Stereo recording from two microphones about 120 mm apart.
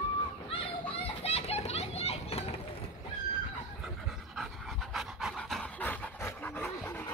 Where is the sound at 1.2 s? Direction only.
60° left (ahead or behind).